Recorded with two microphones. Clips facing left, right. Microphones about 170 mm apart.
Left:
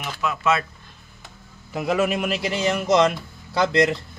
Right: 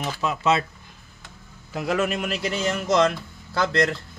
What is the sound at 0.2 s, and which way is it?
Speech, 30° right (ahead or behind).